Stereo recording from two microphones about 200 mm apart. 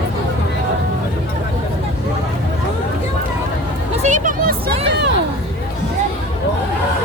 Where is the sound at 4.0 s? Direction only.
40° right (ahead or behind).